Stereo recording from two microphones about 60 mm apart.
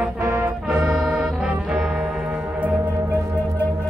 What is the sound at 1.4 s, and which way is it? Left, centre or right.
Trombone, centre.